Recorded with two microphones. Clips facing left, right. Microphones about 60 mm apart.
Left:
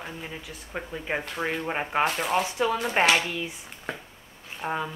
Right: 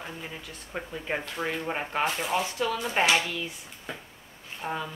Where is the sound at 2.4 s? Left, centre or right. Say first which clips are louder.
Left 3 dB; left.